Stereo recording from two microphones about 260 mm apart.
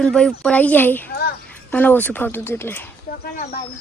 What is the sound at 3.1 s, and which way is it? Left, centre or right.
Speech, left.